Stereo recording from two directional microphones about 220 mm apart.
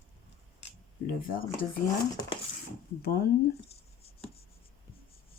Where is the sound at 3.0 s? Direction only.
45° left (ahead or behind).